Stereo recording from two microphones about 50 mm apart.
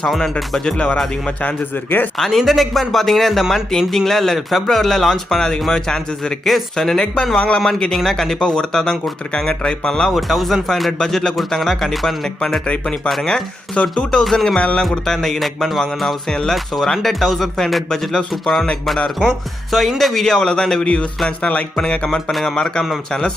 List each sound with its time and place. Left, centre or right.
0.2 s speech: centre
1.4 s speech: left
2.1 s speech: centre
7.3 s music: left
7.9 s speech: centre
10.1 s speech: centre
13.8 s music: left
14.3 s speech: centre
16.3 s speech: centre
21.2 s music: left